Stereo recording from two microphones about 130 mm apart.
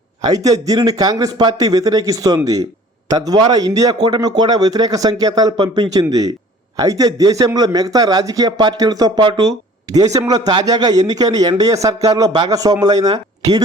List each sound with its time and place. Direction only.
0.4 s speech: 25° right (ahead or behind)